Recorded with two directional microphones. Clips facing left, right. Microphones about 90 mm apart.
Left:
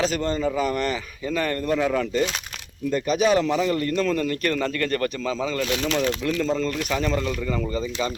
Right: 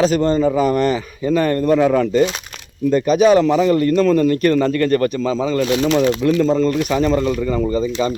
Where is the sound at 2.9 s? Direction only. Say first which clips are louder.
Right 8 dB; 40° right (ahead or behind).